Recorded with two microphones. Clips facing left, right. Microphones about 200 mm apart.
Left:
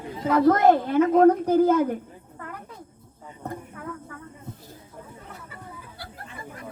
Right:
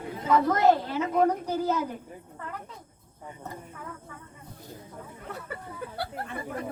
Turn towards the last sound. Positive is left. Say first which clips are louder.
# right 6 dB
turn(degrees=-65)  # may be behind; listen again after turning